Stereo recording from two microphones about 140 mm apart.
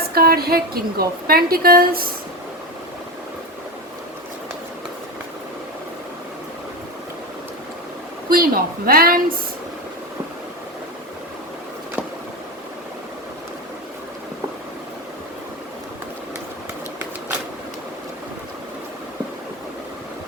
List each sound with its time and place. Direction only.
0.1 s a woman's voice: 90° right
8.3 s a woman's voice: 90° right